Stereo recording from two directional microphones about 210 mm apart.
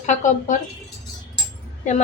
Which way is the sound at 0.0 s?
35° left (ahead or behind).